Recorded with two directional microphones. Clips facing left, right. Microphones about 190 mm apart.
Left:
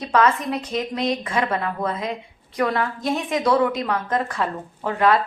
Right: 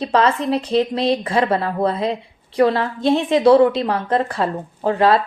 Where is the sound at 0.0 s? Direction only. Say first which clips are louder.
Right 2 dB; 30° right (ahead or behind).